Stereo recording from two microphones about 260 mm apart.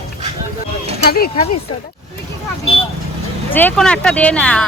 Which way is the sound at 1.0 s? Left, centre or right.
Left.